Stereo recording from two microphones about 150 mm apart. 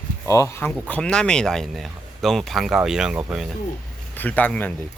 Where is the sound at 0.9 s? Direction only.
5° left (ahead or behind).